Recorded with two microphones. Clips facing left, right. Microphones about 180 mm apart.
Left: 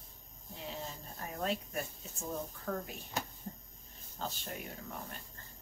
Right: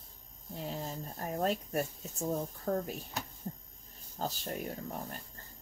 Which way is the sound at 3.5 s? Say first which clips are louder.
Right 4 dB; 35° right (ahead or behind).